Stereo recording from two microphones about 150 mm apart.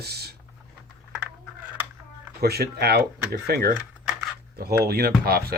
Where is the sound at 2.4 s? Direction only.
90° right.